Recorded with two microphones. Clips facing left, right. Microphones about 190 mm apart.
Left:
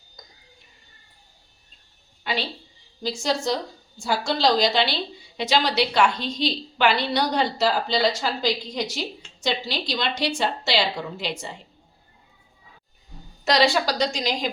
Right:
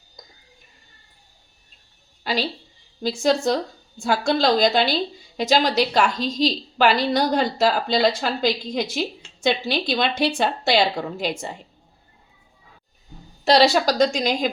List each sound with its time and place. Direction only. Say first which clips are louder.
3.0 s a woman's voice: right 5 dB; 55° right (ahead or behind)
13.4 s a woman's voice: right 4 dB; 35° right (ahead or behind); by 14.5 s 50° right (ahead or behind)